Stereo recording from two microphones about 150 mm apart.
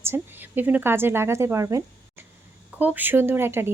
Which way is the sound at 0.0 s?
15° right (ahead or behind).